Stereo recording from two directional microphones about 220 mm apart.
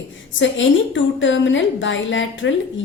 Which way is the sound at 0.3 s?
60° left (ahead or behind).